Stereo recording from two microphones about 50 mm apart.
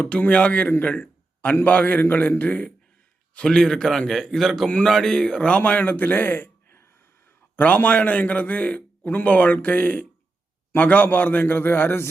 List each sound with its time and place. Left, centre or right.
0.0 s a man's voice: left
3.3 s a man's voice: centre; by 6.8 s left
7.5 s a man's voice: left